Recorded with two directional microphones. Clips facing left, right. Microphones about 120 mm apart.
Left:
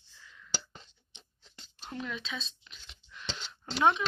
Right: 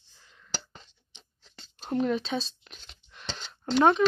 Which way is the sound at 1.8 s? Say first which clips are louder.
Right 12 dB; 40° right (ahead or behind).